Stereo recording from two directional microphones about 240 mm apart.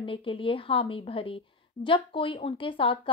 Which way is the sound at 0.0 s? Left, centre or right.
Left.